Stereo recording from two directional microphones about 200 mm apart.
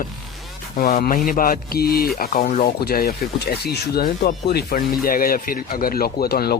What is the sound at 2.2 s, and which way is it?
Speech, 40° left (ahead or behind).